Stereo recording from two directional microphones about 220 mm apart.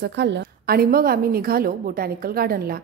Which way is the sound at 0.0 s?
50° right (ahead or behind).